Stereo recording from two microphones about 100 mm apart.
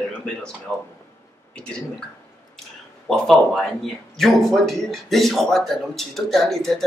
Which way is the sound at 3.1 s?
5° left (ahead or behind).